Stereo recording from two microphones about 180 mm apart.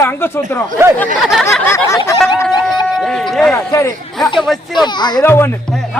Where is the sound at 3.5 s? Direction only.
15° left (ahead or behind).